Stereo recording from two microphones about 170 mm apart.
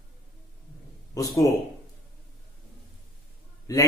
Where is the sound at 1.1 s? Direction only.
20° left (ahead or behind).